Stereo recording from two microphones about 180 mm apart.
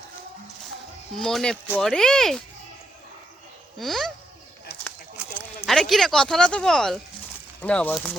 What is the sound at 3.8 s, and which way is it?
Speech, centre (ahead or behind).